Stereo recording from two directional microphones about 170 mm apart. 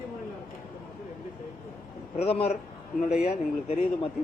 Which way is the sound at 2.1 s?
35° left (ahead or behind).